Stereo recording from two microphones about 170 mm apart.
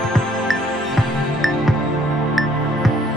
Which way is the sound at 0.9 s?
Centre (ahead or behind).